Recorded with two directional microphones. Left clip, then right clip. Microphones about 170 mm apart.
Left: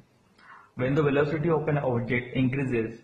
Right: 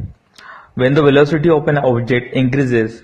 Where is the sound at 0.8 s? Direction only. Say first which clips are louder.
Right 13 dB; 40° right (ahead or behind).